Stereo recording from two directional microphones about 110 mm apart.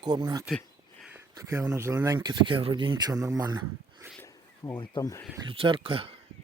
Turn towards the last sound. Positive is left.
turn(degrees=-55)  # may be behind; listen again after turning